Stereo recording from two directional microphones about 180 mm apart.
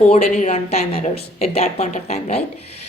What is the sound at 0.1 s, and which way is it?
Speech, 40° left (ahead or behind).